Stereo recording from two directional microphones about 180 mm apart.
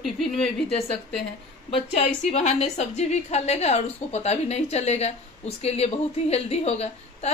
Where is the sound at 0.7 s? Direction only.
35° left (ahead or behind).